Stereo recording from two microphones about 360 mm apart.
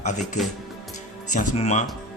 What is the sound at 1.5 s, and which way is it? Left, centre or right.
Speech, centre.